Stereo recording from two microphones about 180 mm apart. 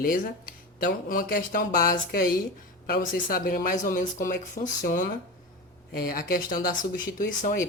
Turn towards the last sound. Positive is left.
turn(degrees=50)  # may be behind; listen again after turning